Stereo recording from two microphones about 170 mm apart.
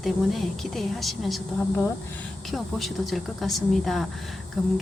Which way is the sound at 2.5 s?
Centre (ahead or behind).